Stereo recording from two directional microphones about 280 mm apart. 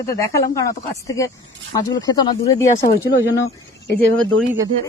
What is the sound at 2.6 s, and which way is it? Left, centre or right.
Speech, left.